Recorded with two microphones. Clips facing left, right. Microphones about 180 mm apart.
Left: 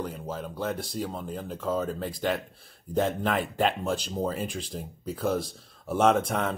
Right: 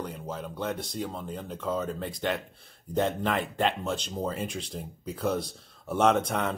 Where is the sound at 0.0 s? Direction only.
Centre (ahead or behind).